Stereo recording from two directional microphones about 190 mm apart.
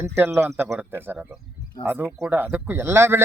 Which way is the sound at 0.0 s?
15° right (ahead or behind).